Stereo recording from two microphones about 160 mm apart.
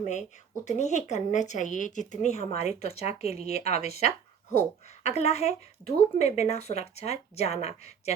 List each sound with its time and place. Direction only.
0.0 s speech: 45° left (ahead or behind)